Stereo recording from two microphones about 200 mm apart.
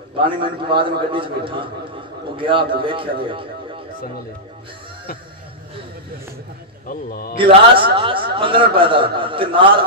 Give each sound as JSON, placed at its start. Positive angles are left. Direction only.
{"t": 0.2, "sound": "a man's voice", "side_deg": -25}
{"t": 6.9, "sound": "a man's voice", "side_deg": 45}
{"t": 7.3, "sound": "a man's voice", "side_deg": -25}